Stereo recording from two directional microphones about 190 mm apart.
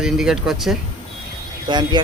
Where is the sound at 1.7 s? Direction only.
20° right (ahead or behind).